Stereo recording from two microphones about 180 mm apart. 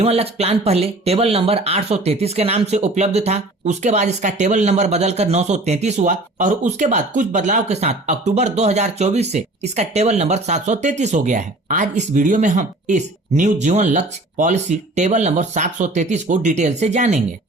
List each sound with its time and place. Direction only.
0.0 s speech: 35° right (ahead or behind)